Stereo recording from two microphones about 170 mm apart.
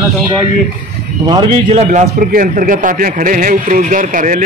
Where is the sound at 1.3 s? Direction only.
25° right (ahead or behind).